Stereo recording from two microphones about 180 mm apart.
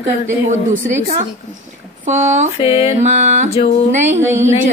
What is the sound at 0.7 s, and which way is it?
A woman's voice, 50° right (ahead or behind).